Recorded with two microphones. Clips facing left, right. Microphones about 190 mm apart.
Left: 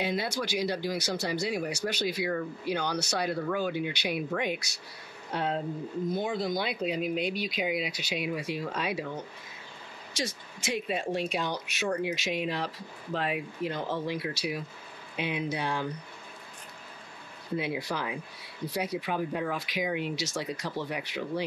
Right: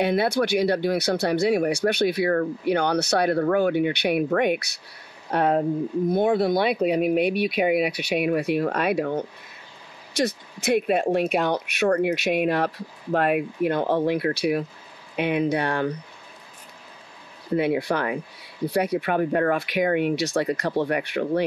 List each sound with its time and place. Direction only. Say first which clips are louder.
0.0 s speech: right 9 dB; 60° right (ahead or behind)
17.5 s speech: right 9 dB; 65° right (ahead or behind)